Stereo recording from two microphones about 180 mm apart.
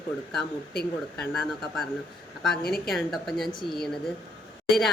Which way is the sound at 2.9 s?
Centre (ahead or behind).